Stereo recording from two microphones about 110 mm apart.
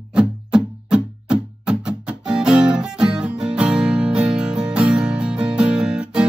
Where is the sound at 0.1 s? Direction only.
10° right (ahead or behind).